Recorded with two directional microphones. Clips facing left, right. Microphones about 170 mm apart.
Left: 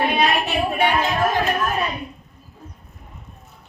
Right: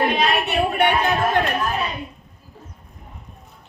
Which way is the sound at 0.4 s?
60° right (ahead or behind).